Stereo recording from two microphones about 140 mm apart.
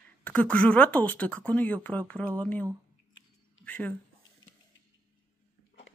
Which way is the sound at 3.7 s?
10° left (ahead or behind).